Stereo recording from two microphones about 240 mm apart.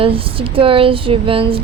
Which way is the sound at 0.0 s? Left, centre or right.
Right.